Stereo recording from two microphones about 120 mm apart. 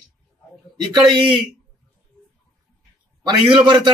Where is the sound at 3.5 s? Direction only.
40° right (ahead or behind).